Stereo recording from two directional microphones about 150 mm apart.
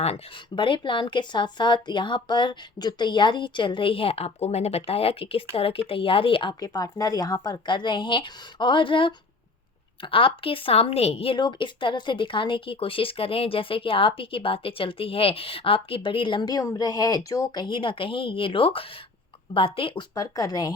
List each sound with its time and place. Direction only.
0.5 s a woman's voice: 35° left (ahead or behind)
20.1 s speech: 25° left (ahead or behind)